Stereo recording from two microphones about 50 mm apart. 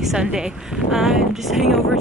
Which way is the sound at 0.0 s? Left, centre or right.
Centre.